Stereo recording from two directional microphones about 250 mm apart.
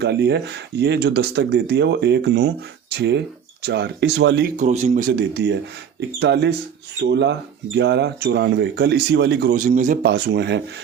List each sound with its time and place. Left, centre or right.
0.0 s speech: right
4.5 s speech: right